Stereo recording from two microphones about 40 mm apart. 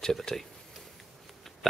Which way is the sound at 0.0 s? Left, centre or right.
Centre.